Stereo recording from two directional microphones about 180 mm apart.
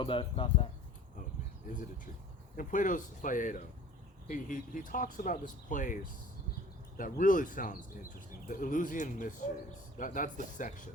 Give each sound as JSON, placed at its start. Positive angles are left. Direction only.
{"t": 0.0, "sound": "speech", "side_deg": 30}
{"t": 1.7, "sound": "speech", "side_deg": 50}